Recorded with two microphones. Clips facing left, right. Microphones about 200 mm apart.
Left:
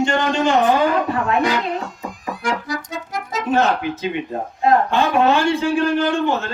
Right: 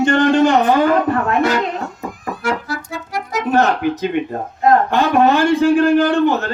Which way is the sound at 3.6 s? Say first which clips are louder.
Right 4 dB; 55° right (ahead or behind).